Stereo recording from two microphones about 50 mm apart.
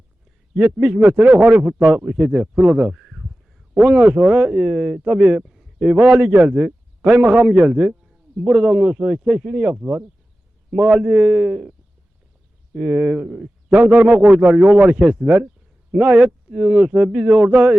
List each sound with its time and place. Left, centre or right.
0.6 s speech: right
2.9 s a sound: centre
3.8 s speech: right
5.5 s a sound: centre
5.8 s a man's voice: right
12.8 s speech: right
13.2 s a man's voice: centre
13.7 s speech: right
15.9 s speech: right